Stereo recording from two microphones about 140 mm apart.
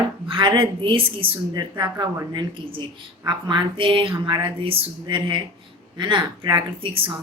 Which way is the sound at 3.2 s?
30° right (ahead or behind).